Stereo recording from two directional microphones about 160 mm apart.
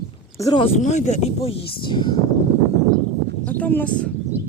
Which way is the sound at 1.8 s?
30° left (ahead or behind).